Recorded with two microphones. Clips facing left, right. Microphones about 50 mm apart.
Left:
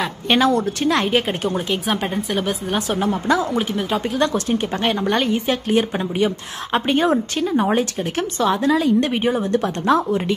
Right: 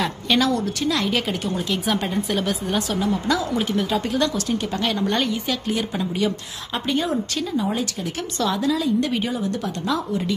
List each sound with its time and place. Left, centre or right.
0.3 s a woman's voice: left
1.9 s speech: left
2.1 s speech: centre
2.7 s a woman's voice: left
3.5 s a woman's voice: centre
4.2 s a woman's voice: left
7.5 s a woman's voice: left